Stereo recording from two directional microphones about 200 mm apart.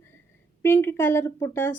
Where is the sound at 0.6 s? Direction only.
10° left (ahead or behind).